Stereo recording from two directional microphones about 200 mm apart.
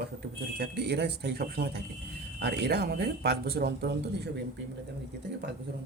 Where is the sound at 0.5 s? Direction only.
55° right (ahead or behind).